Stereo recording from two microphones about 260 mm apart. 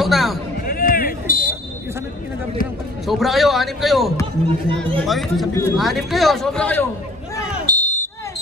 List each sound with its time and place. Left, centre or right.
0.0 s speech: centre
0.7 s a sound: left
3.1 s a man's voice: centre
7.6 s smoke detector: left